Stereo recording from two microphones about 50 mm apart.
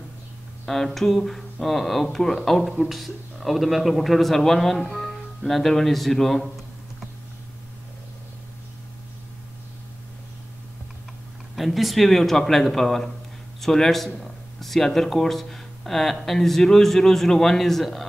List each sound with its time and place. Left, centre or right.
0.7 s speech: centre
11.5 s speech: centre